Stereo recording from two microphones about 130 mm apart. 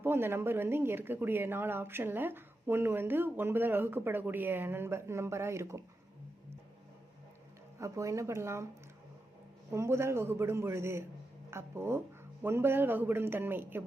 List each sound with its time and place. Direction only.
0.0 s a woman's voice: 15° right (ahead or behind)
7.8 s a man's voice: 25° right (ahead or behind)
9.7 s a man's voice: 20° right (ahead or behind)